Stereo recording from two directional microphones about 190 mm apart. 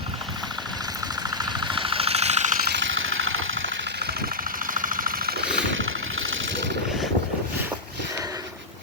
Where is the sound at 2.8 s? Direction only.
90° right; by 5.4 s 50° right (ahead or behind).